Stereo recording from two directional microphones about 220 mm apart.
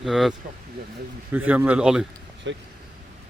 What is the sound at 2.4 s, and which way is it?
Speech, 55° right (ahead or behind).